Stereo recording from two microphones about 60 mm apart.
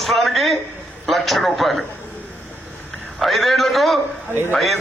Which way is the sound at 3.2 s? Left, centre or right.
Centre.